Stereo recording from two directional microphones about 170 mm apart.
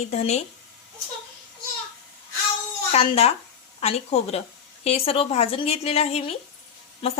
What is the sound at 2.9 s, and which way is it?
A woman's voice, 35° left (ahead or behind).